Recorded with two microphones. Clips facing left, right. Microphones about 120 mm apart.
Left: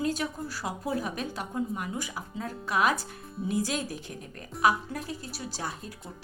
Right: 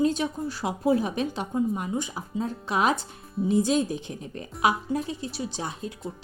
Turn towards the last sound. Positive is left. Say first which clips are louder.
# right 4 dB
turn(degrees=-20)  # may be behind; listen again after turning